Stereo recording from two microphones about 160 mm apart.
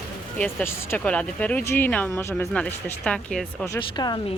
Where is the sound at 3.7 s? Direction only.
25° left (ahead or behind).